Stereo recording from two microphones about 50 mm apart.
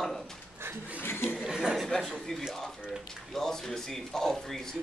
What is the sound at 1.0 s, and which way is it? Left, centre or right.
Speech, left.